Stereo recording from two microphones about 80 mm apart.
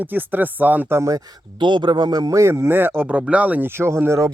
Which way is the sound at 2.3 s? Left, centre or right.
Right.